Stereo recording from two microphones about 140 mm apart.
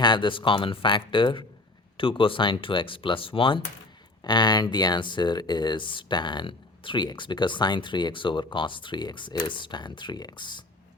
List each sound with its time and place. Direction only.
0.0 s speech: 35° left (ahead or behind)